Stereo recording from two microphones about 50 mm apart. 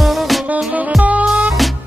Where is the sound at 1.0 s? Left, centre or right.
Right.